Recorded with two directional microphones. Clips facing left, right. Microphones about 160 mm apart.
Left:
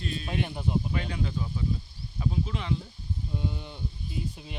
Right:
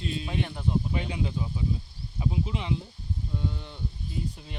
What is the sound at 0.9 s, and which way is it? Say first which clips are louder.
Speech: right 1 dB; 15° right (ahead or behind).